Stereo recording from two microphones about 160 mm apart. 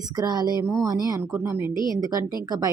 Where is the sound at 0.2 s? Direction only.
25° right (ahead or behind).